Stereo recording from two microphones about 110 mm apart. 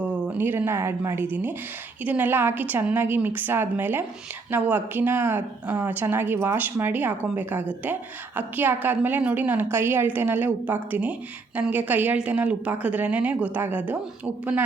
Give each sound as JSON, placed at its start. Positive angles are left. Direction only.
{"t": 0.3, "sound": "speech", "side_deg": -20}